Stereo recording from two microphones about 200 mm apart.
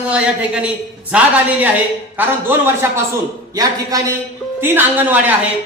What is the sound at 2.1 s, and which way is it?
A man's voice, 10° right (ahead or behind).